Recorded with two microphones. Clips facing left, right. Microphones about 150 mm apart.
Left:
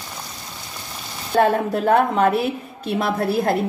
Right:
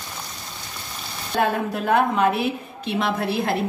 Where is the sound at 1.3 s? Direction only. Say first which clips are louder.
Left 5 dB; 40° left (ahead or behind).